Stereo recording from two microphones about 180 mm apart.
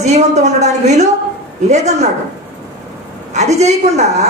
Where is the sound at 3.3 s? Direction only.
40° right (ahead or behind).